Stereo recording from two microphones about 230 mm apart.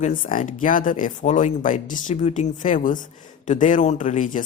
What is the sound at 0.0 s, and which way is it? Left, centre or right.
Speech, left.